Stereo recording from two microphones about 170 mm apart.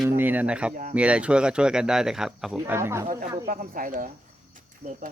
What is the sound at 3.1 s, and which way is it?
Speech, 55° right (ahead or behind).